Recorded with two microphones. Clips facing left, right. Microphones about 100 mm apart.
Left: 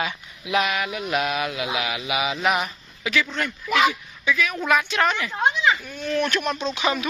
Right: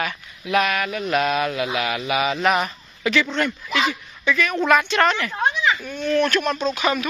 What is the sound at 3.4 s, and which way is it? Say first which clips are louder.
A woman's voice: left 1 dB; centre (ahead or behind).